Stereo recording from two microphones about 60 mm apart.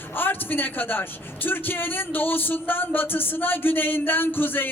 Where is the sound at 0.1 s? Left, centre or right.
Left.